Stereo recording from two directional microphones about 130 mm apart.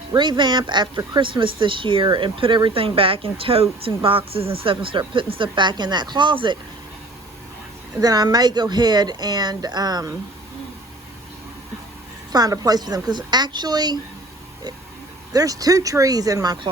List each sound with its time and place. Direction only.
0.1 s speech: 35° right (ahead or behind)
7.9 s speech: 30° right (ahead or behind)
12.3 s speech: 30° right (ahead or behind)
15.3 s speech: 25° right (ahead or behind)